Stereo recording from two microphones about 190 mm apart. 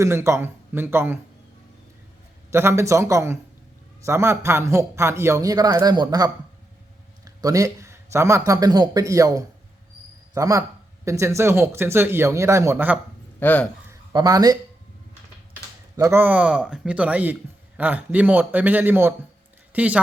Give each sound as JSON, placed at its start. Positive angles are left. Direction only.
{"t": 0.0, "sound": "a man's voice", "side_deg": -15}
{"t": 2.5, "sound": "a man's voice", "side_deg": -15}
{"t": 13.4, "sound": "speech", "side_deg": 10}
{"t": 14.1, "sound": "speech", "side_deg": -20}
{"t": 16.0, "sound": "a man's voice", "side_deg": -15}